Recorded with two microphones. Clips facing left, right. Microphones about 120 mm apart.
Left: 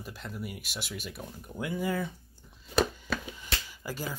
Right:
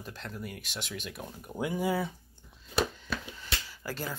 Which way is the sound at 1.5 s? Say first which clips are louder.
Right 2 dB; 15° right (ahead or behind).